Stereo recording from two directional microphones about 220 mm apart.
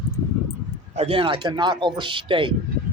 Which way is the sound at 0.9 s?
25° right (ahead or behind).